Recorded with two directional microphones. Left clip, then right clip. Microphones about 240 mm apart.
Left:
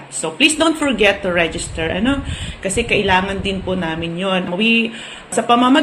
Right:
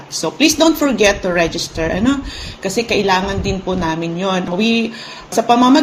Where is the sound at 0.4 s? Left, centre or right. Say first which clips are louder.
Right 2 dB; right.